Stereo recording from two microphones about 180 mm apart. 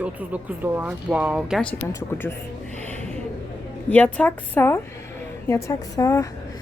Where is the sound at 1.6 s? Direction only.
5° left (ahead or behind).